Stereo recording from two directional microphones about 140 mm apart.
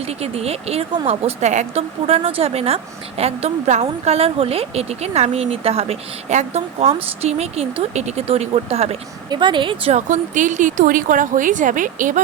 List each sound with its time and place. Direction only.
0.0 s speech: 45° right (ahead or behind)
9.3 s speech: 35° right (ahead or behind)
9.9 s speech: 65° right (ahead or behind)